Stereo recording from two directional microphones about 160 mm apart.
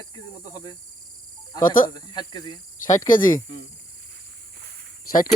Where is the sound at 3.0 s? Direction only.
55° left (ahead or behind).